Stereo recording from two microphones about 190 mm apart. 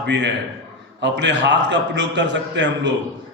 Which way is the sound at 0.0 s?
65° right (ahead or behind).